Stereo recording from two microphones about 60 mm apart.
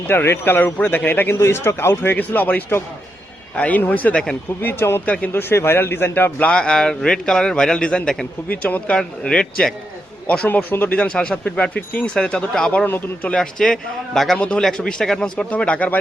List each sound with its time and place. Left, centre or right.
0.1 s speech: left
1.4 s speech: left
2.1 s speech: left
4.6 s speech: left
5.0 s speech: left
5.3 s speech: left
6.5 s a man's voice: centre
8.4 s speech: left
8.9 s a man's voice: centre
10.4 s speech: left
10.9 s a man's voice: centre
14.3 s a man's voice: centre
15.4 s speech: left